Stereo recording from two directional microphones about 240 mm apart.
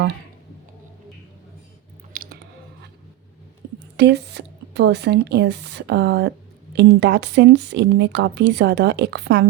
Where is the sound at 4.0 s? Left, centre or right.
Right.